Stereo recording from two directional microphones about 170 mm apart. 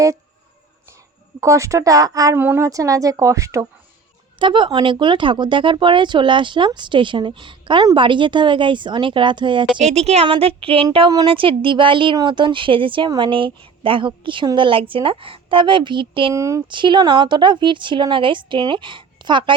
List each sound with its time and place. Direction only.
1.4 s a woman's voice: 15° right (ahead or behind)
4.4 s a woman's voice: 30° right (ahead or behind)
9.7 s a woman's voice: 40° right (ahead or behind)
16.3 s a woman's voice: 20° right (ahead or behind)